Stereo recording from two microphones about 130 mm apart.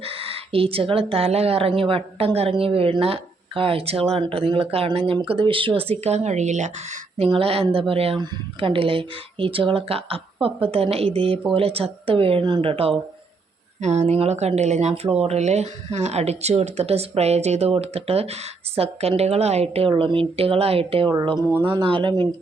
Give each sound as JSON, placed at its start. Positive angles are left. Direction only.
{"t": 0.0, "sound": "speech", "side_deg": -50}
{"t": 7.3, "sound": "speech", "side_deg": -45}
{"t": 13.8, "sound": "speech", "side_deg": -60}
{"t": 19.9, "sound": "speech", "side_deg": -40}